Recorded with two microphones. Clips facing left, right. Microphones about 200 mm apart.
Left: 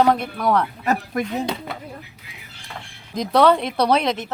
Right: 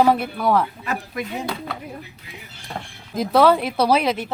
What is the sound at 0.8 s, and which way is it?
Speech, 45° left (ahead or behind).